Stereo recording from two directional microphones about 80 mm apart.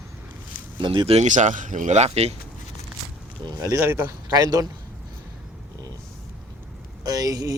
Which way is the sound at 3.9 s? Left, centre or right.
Right.